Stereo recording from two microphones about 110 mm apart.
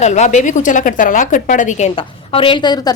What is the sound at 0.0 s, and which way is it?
Speech, 90° left.